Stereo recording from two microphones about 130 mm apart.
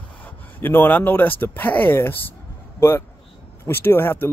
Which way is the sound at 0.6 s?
15° left (ahead or behind).